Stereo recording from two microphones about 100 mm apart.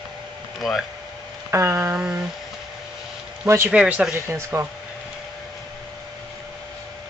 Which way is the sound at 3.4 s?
25° right (ahead or behind).